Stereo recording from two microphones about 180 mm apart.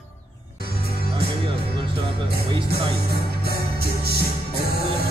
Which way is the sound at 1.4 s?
30° right (ahead or behind).